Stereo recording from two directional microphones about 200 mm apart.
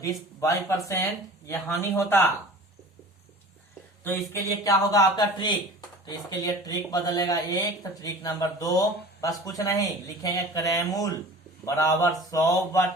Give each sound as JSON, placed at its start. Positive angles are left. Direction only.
{"t": 0.3, "sound": "speech", "side_deg": 15}
{"t": 4.3, "sound": "speech", "side_deg": 15}